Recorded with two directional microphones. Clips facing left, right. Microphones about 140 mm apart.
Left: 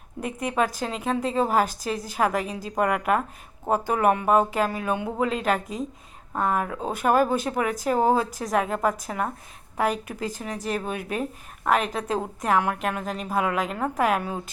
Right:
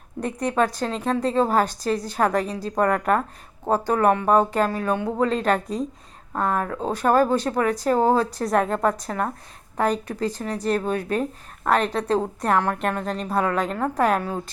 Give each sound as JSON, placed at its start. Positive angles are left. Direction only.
{"t": 0.2, "sound": "a woman's voice", "side_deg": 5}